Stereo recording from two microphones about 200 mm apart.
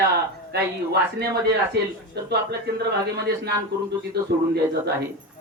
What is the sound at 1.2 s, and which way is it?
Speech, 50° right (ahead or behind).